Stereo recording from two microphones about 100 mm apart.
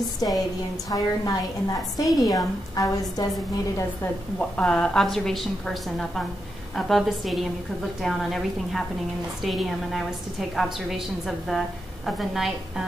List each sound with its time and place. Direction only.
0.2 s a woman's voice: 45° left (ahead or behind)
4.4 s a woman's voice: 10° left (ahead or behind)